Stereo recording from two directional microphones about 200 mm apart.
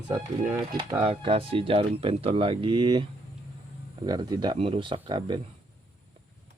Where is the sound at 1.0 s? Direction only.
25° right (ahead or behind).